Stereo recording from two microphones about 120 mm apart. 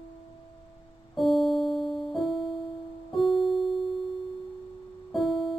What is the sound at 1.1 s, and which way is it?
Music, centre (ahead or behind).